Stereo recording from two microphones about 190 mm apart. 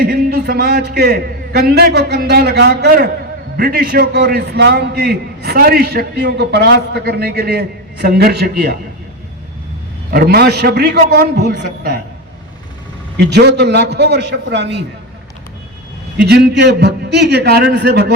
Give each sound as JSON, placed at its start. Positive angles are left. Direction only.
{"t": 0.0, "sound": "a man's voice", "side_deg": -55}
{"t": 10.1, "sound": "a man's voice", "side_deg": -55}
{"t": 13.1, "sound": "a man's voice", "side_deg": -60}
{"t": 16.1, "sound": "a man's voice", "side_deg": -60}